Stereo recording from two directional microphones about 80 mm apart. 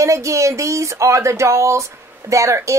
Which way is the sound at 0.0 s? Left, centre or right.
Right.